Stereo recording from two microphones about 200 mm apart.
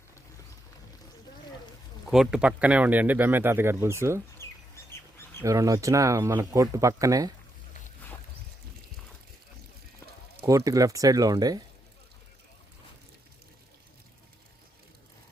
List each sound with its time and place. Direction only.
2.0 s a man's voice: centre (ahead or behind)
4.4 s bird: 15° left (ahead or behind)
5.4 s a man's voice: 15° right (ahead or behind)
10.4 s a man's voice: 15° right (ahead or behind)